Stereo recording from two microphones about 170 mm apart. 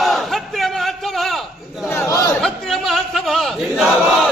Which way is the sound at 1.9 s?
15° left (ahead or behind).